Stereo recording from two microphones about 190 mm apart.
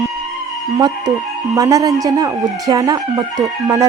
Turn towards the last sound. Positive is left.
turn(degrees=-20)  # may be behind; listen again after turning